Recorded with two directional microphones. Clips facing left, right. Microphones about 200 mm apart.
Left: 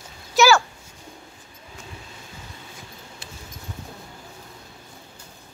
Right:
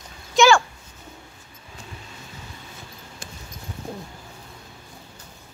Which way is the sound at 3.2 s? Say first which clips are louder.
Right 4 dB; 45° right (ahead or behind).